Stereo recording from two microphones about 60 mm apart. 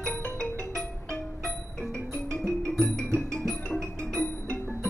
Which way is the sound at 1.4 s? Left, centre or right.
Centre.